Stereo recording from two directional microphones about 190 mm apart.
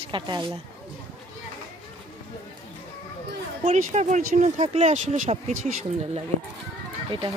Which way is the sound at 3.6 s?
35° right (ahead or behind).